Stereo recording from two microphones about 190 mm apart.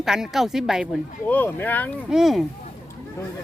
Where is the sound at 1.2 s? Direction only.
10° left (ahead or behind).